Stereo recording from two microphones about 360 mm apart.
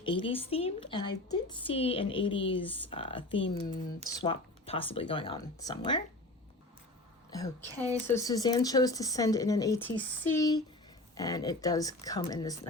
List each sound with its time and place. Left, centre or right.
0.0 s speech: centre
7.3 s a woman's voice: centre